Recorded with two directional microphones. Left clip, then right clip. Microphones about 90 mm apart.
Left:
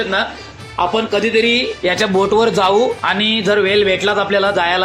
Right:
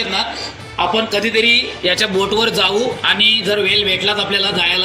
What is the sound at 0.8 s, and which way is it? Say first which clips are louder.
Speech: left 1 dB; 15° left (ahead or behind).